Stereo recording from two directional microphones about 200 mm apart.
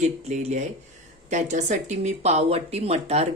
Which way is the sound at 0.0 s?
35° right (ahead or behind).